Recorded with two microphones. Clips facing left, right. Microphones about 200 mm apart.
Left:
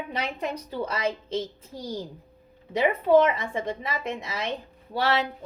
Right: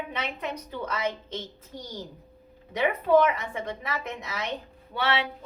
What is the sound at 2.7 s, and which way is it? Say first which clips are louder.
A woman's voice: left 2 dB; 30° left (ahead or behind).